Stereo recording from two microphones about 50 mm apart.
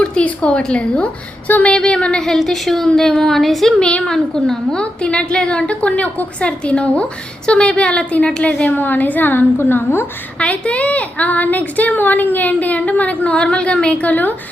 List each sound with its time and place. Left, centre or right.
0.0 s a sound: left
0.7 s a woman's voice: left; by 3.8 s centre
3.8 s a woman's voice: centre
4.0 s a woman's voice: centre
8.7 s a woman's voice: left
10.3 s a woman's voice: left